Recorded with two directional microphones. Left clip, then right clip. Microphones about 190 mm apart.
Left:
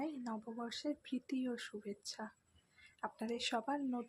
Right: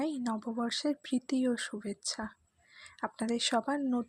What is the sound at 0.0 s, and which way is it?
Speech, 45° right (ahead or behind).